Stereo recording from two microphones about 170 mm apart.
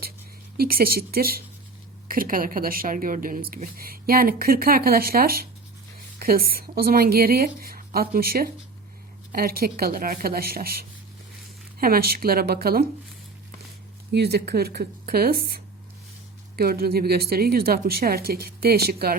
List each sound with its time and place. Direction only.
0.5 s a woman's voice: 60° right (ahead or behind)
14.1 s a woman's voice: 70° right (ahead or behind)